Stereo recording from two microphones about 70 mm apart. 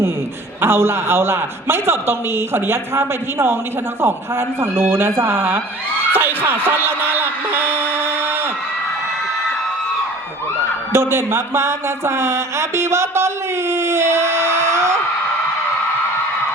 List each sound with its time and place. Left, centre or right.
0.6 s speech: right
6.1 s a sound: right
10.9 s speech: right